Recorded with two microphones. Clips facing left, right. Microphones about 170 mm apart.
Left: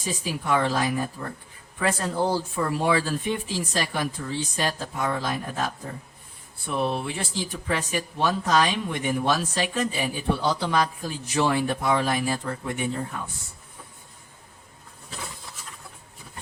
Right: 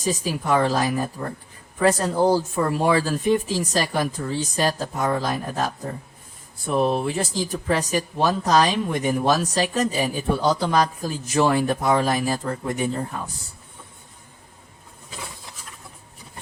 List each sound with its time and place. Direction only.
0.0 s speech: 40° right (ahead or behind)